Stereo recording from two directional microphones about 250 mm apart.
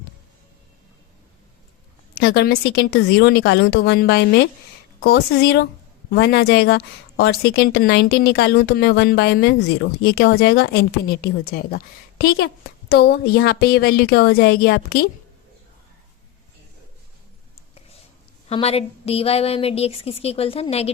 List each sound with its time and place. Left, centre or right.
2.1 s speech: left
18.4 s a woman's voice: left